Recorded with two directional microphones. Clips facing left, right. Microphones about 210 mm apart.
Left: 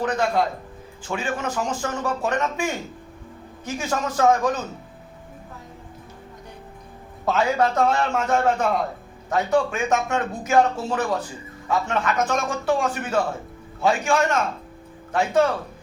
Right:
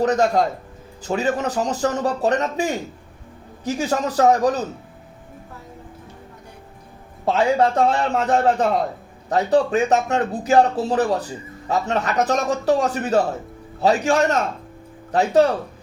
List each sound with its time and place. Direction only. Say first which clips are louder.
0.0 s speech: right 4 dB; 40° right (ahead or behind)
7.3 s speech: right 3 dB; 30° right (ahead or behind)